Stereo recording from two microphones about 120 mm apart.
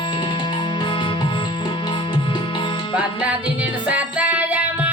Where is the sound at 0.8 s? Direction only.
40° left (ahead or behind).